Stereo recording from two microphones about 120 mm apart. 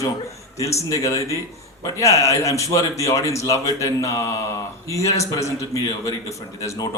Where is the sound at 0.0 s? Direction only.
25° left (ahead or behind).